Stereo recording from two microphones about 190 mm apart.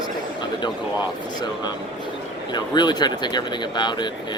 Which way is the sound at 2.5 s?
20° left (ahead or behind).